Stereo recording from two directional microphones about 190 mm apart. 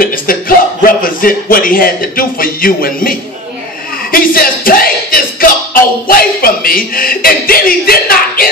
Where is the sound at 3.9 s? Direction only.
50° left (ahead or behind).